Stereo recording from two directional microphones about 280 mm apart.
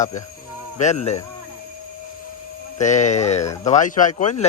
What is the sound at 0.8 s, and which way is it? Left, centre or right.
Speech, left.